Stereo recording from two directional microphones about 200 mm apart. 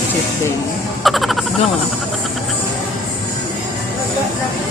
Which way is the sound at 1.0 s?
Centre (ahead or behind).